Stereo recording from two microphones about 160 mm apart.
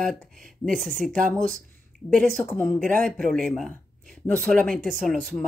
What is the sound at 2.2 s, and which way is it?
Speech, 5° left (ahead or behind).